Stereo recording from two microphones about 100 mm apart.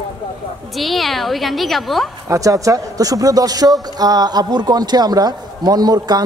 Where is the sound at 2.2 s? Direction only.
35° right (ahead or behind).